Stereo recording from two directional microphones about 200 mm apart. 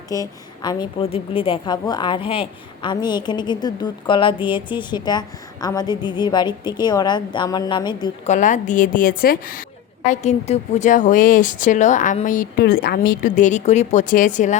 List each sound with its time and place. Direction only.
0.1 s a woman's voice: 20° left (ahead or behind)
8.3 s a woman's voice: 40° left (ahead or behind)
10.1 s a woman's voice: 35° left (ahead or behind)